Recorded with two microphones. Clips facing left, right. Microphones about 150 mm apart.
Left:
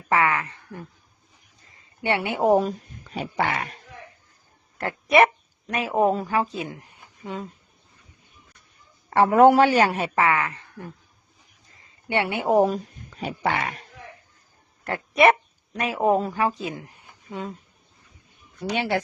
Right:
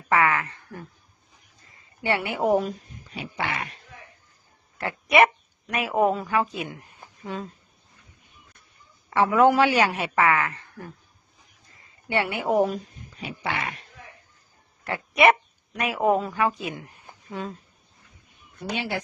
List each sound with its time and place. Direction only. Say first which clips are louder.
0.1 s speech: even; 25° left (ahead or behind); by 3.8 s 45° left (ahead or behind)
5.6 s a man's voice: left 1 dB; 30° left (ahead or behind)
9.0 s a man's voice: left 4 dB; 50° left (ahead or behind); by 10.9 s 20° left (ahead or behind)
12.0 s a woman's voice: left 2 dB; 25° left (ahead or behind); by 13.8 s 45° left (ahead or behind)
14.8 s speech: left 2 dB; 40° left (ahead or behind)
15.7 s a man's voice: left 1 dB; 30° left (ahead or behind)
16.6 s a sound: left 1 dB; 30° left (ahead or behind)
18.8 s speech: left 6 dB; 60° left (ahead or behind)